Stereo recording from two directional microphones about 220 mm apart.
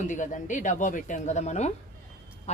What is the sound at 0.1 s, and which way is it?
Speech, 35° left (ahead or behind).